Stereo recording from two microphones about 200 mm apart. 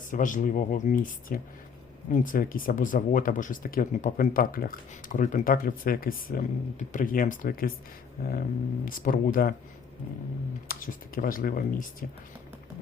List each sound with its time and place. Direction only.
0.1 s speech: 40° left (ahead or behind)
10.7 s speech: 45° left (ahead or behind)